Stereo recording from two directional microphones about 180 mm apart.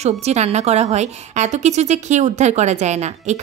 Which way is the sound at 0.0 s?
40° right (ahead or behind).